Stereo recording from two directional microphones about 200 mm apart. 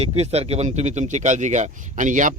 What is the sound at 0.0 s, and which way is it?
A man's voice, 30° right (ahead or behind).